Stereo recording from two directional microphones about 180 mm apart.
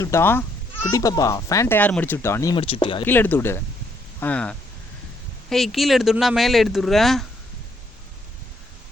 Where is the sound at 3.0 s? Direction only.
10° left (ahead or behind).